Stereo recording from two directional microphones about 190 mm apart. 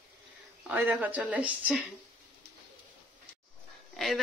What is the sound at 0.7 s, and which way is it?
Speech, 10° right (ahead or behind).